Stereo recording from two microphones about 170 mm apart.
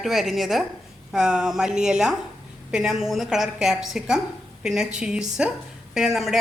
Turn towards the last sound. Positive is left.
turn(degrees=0)  # may be behind; listen again after turning